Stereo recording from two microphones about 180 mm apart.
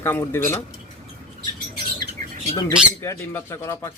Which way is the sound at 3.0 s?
15° left (ahead or behind).